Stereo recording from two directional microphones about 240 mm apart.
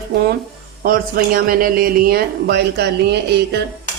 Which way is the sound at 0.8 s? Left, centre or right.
Right.